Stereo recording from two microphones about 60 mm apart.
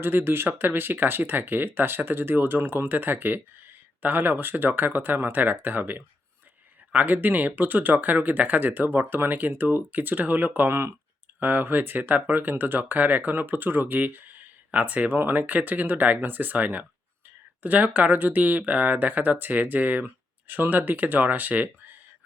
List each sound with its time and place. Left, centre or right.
0.0 s speech: right
10.7 s speech: right
11.3 s speech: right